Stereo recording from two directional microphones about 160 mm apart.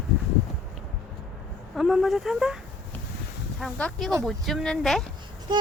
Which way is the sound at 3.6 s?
Centre (ahead or behind).